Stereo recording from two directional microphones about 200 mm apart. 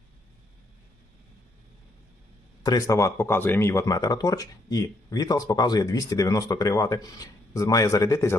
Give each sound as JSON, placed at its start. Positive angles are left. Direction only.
{"t": 2.6, "sound": "speech", "side_deg": 20}